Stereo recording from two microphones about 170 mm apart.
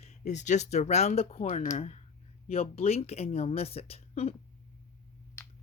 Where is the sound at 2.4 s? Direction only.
35° left (ahead or behind).